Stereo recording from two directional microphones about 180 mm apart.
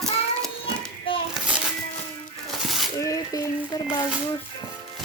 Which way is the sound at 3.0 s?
20° left (ahead or behind).